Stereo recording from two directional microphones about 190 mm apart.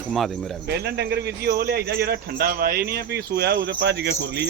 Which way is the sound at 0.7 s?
60° right (ahead or behind).